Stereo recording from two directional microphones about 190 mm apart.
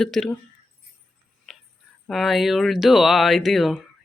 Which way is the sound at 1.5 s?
Centre (ahead or behind).